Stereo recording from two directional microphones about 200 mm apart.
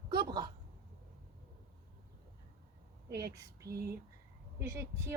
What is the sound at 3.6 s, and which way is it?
Speech, 50° right (ahead or behind).